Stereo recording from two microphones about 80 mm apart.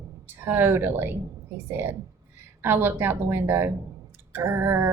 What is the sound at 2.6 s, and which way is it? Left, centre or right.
Speech, right.